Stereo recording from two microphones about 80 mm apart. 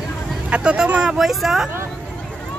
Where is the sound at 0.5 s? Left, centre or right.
Centre.